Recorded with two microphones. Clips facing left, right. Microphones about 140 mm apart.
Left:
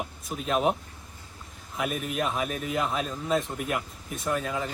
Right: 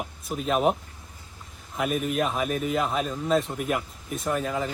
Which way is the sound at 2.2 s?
Centre (ahead or behind).